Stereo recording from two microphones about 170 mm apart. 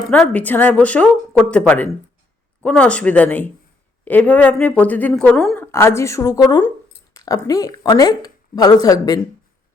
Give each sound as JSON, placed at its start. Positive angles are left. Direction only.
{"t": 0.1, "sound": "speech", "side_deg": 10}